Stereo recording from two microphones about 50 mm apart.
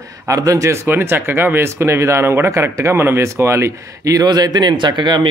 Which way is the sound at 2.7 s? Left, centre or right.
Right.